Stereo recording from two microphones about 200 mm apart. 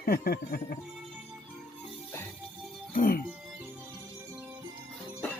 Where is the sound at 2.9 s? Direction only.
45° left (ahead or behind).